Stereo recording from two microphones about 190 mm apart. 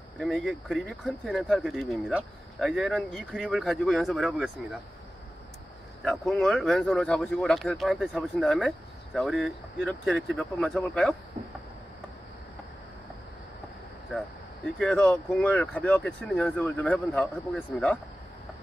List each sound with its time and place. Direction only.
0.2 s speech: centre (ahead or behind)
6.0 s speech: centre (ahead or behind)
11.4 s a sound: 35° right (ahead or behind)
14.8 s speech: 5° left (ahead or behind)